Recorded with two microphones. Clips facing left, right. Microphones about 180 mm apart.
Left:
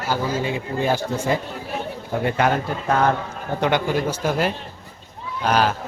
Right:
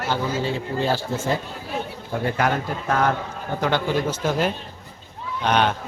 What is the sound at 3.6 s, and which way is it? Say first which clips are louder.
A man's voice: left 2 dB; 15° left (ahead or behind).